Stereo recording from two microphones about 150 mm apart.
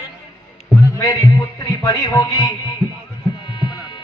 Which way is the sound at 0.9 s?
25° left (ahead or behind).